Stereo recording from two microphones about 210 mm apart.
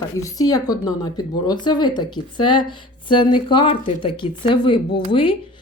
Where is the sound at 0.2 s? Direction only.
15° left (ahead or behind).